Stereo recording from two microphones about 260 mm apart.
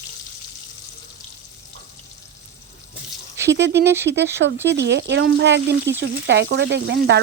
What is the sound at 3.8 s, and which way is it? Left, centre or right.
Speech, centre.